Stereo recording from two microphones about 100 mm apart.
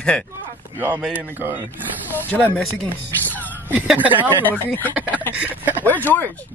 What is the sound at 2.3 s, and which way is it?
Speech, 10° left (ahead or behind).